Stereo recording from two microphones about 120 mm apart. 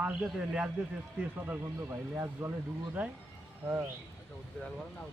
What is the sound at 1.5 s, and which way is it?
Speech, 20° right (ahead or behind).